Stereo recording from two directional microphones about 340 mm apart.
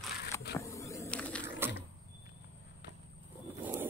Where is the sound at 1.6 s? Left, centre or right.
Centre.